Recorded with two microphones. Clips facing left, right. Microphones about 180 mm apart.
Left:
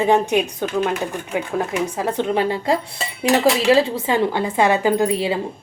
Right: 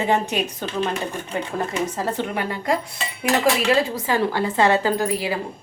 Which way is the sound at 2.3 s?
25° left (ahead or behind).